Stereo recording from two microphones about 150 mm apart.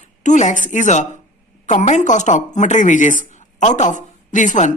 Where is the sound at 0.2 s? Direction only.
55° left (ahead or behind).